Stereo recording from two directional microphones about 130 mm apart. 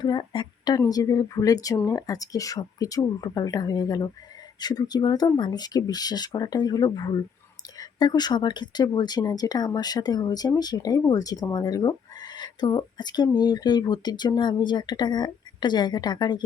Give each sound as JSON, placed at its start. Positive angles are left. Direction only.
{"t": 0.0, "sound": "a woman's voice", "side_deg": 35}